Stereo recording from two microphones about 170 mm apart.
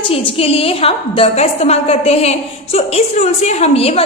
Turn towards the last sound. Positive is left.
turn(degrees=35)  # may be behind; listen again after turning